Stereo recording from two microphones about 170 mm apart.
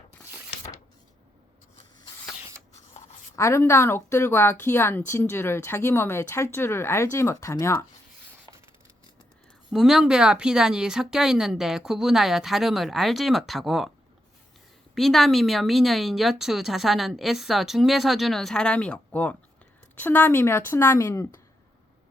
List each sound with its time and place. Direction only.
3.3 s speech: 15° left (ahead or behind)
8.4 s a sound: 15° right (ahead or behind)
9.7 s speech: 5° right (ahead or behind)
14.9 s speech: centre (ahead or behind)